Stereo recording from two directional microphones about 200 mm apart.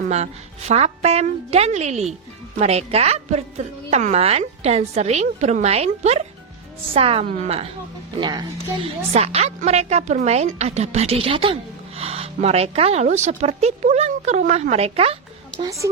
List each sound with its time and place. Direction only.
0.7 s a woman's voice: 35° right (ahead or behind)
8.2 s a woman's voice: 20° right (ahead or behind)
8.7 s speech: 30° right (ahead or behind)